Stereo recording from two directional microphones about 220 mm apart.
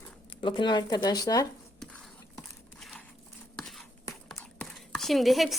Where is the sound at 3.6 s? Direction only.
Centre (ahead or behind).